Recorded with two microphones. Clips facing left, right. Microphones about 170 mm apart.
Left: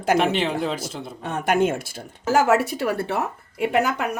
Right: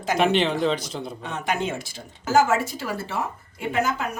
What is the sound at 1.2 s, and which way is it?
Speech, 50° left (ahead or behind).